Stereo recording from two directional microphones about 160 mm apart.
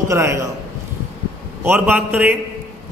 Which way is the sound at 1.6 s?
10° right (ahead or behind).